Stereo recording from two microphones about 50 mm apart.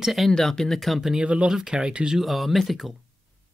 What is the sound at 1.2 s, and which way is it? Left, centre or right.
Speech, right.